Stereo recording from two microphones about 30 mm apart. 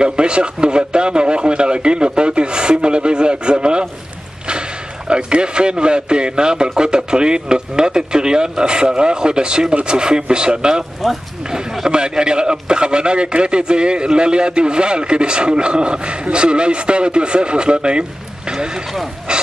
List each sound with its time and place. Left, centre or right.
0.0 s a man's voice: right
11.9 s a man's voice: right
19.3 s a man's voice: right